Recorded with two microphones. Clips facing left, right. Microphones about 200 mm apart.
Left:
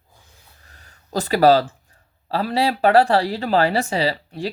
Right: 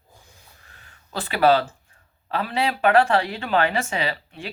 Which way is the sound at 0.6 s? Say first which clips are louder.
Left 5 dB; 40° left (ahead or behind).